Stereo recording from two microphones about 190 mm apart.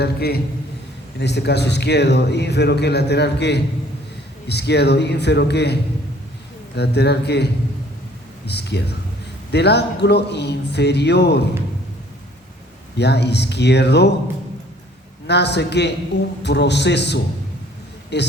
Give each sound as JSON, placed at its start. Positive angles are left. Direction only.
{"t": 0.0, "sound": "speech", "side_deg": 55}
{"t": 6.7, "sound": "speech", "side_deg": 60}
{"t": 8.4, "sound": "speech", "side_deg": 60}
{"t": 13.0, "sound": "speech", "side_deg": 60}
{"t": 15.3, "sound": "speech", "side_deg": 60}